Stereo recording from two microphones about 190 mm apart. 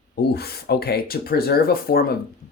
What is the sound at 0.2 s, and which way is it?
Speech, 55° left (ahead or behind).